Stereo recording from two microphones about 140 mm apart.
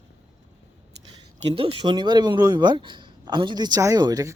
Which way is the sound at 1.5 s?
40° right (ahead or behind).